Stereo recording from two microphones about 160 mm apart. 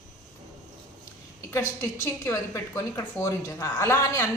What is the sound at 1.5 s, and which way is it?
A woman's voice, 15° left (ahead or behind).